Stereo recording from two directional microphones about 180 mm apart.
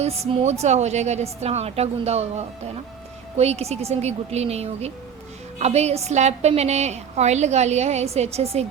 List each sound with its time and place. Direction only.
0.0 s a woman's voice: 35° right (ahead or behind)